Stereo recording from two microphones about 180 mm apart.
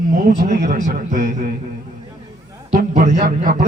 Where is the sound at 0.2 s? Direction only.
45° right (ahead or behind).